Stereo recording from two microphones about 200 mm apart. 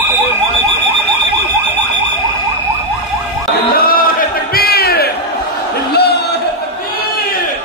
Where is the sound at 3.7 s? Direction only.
45° left (ahead or behind).